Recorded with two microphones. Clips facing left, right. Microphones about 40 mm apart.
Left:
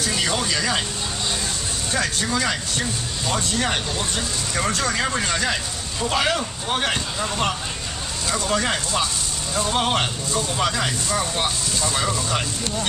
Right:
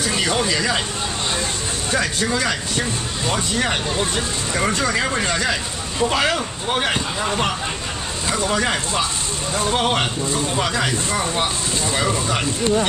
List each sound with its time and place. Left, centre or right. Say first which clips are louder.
0.0 s speech: right 3 dB; centre
2.1 s speech: right 2 dB; centre
3.3 s speech: right 2 dB; centre
8.3 s speech: right 2 dB; centre